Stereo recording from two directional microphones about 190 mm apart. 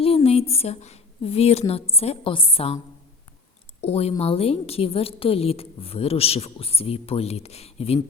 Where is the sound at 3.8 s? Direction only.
35° left (ahead or behind).